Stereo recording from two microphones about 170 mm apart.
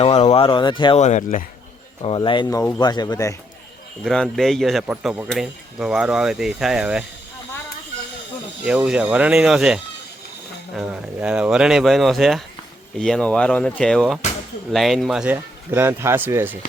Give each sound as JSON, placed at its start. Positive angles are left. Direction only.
{"t": 0.0, "sound": "speech", "side_deg": 40}
{"t": 1.0, "sound": "speech", "side_deg": 45}
{"t": 2.0, "sound": "speech", "side_deg": 30}
{"t": 4.0, "sound": "speech", "side_deg": 5}
{"t": 8.6, "sound": "speech", "side_deg": -5}